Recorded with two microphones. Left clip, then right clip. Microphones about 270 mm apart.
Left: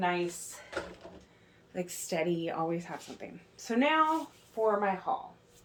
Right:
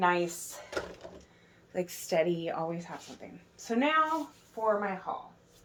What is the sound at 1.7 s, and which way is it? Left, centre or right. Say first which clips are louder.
A woman's voice: right 4 dB; centre.